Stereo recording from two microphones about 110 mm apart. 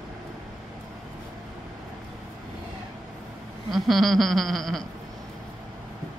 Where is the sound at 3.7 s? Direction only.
Centre (ahead or behind).